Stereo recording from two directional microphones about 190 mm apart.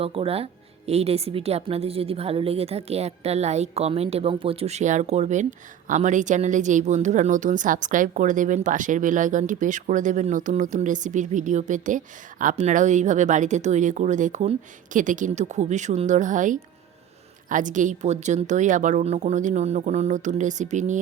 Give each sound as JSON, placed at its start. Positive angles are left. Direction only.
{"t": 0.0, "sound": "a woman's voice", "side_deg": -30}